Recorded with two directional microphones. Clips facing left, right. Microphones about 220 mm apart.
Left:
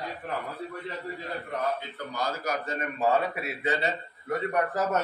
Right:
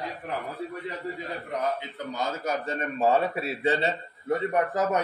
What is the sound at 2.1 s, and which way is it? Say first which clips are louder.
A man's voice: right 1 dB; 25° right (ahead or behind).